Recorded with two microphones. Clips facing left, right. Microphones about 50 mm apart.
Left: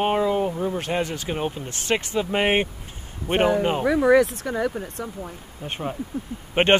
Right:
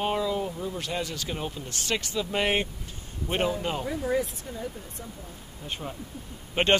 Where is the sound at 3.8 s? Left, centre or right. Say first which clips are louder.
Left 13 dB; left.